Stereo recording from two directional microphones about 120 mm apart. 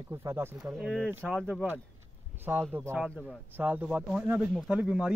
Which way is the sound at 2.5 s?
20° right (ahead or behind).